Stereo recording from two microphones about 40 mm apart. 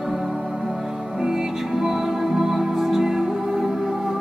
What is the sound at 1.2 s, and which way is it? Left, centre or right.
Music, centre.